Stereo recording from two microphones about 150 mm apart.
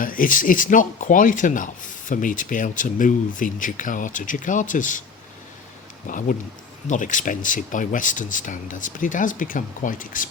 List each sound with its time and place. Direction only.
0.0 s speech: 65° left (ahead or behind)
6.1 s speech: 60° left (ahead or behind)